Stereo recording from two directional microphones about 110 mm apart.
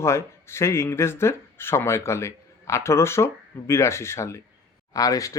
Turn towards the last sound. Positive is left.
turn(degrees=30)  # may be behind; listen again after turning